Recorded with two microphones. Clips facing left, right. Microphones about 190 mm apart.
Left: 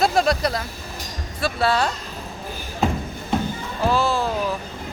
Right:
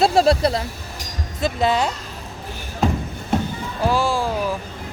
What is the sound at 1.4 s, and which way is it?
Speech, 20° right (ahead or behind).